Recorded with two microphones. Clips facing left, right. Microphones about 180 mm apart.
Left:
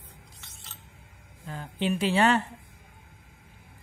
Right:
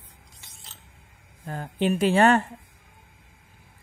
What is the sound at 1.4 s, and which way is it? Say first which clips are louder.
A woman's voice: right 4 dB; 50° right (ahead or behind).